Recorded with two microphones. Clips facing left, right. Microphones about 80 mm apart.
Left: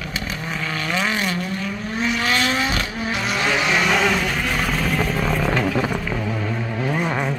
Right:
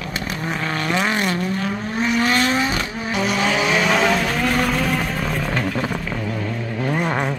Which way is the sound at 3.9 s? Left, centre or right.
Right.